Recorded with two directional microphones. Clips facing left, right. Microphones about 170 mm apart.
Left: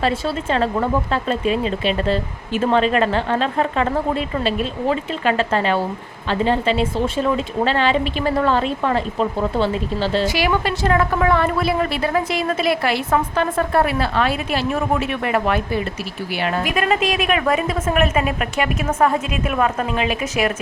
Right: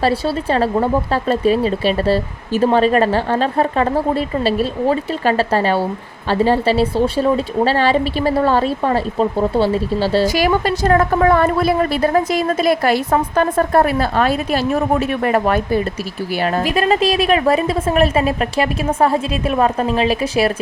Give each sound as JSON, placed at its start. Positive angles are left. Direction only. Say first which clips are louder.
{"t": 0.0, "sound": "a woman's voice", "louder": "right 4 dB", "side_deg": -35}